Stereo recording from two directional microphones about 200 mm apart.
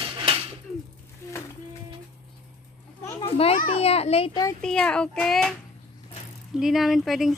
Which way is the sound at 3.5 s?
35° left (ahead or behind).